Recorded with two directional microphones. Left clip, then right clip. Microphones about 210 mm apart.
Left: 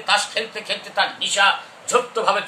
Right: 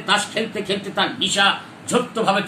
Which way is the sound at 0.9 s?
15° left (ahead or behind).